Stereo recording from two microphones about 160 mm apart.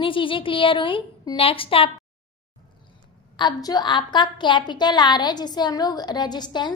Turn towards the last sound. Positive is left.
turn(degrees=25)  # may be behind; listen again after turning